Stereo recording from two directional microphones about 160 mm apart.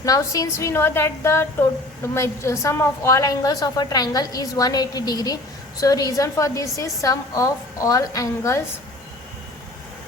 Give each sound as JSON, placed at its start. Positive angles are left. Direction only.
{"t": 0.0, "sound": "a woman's voice", "side_deg": 20}